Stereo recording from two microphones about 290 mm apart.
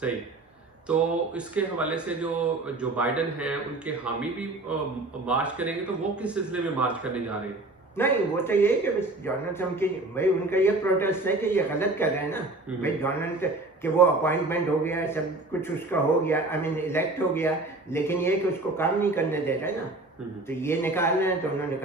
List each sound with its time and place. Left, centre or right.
0.9 s speech: centre
7.9 s speech: centre